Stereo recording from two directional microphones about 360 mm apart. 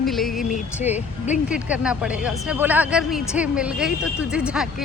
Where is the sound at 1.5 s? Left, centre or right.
Centre.